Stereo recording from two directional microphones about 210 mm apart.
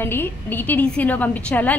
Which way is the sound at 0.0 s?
10° left (ahead or behind).